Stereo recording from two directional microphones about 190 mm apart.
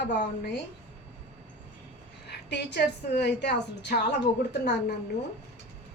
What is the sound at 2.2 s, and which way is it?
A woman's voice, 65° left (ahead or behind).